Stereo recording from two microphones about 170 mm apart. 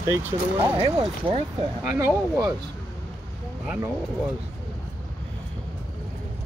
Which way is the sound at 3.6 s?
5° right (ahead or behind).